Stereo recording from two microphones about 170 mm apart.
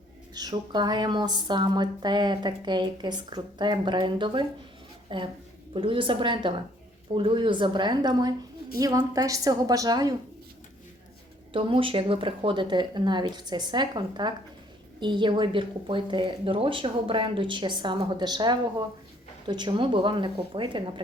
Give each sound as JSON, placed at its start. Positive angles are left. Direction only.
{"t": 0.3, "sound": "a woman's voice", "side_deg": -25}
{"t": 11.5, "sound": "speech", "side_deg": -30}